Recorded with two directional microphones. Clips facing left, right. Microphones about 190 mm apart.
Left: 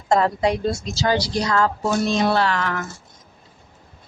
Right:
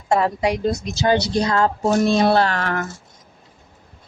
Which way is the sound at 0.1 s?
10° right (ahead or behind).